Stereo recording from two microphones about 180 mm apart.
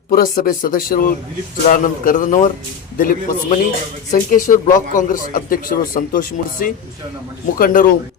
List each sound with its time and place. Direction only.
0.1 s speech: 50° left (ahead or behind)